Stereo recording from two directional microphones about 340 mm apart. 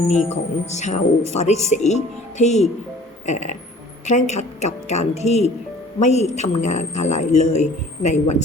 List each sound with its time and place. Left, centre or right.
0.7 s a man's voice: centre